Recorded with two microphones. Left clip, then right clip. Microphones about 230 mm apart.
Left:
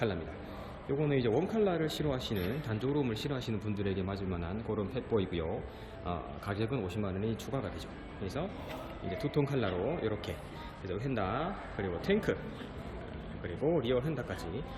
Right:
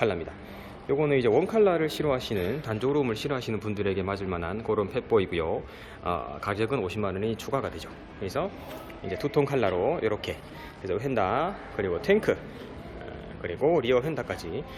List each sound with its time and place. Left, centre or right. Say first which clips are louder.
1.0 s a man's voice: right 8 dB; centre
9.3 s a man's voice: right 9 dB; centre
13.4 s a man's voice: right 8 dB; centre